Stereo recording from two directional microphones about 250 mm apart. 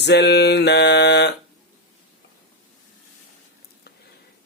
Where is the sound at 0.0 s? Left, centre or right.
Left.